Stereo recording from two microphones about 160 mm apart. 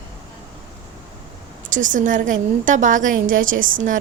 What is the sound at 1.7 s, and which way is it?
A woman's voice, 55° right (ahead or behind).